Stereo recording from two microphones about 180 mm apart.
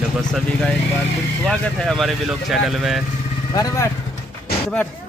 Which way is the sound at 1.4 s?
5° left (ahead or behind).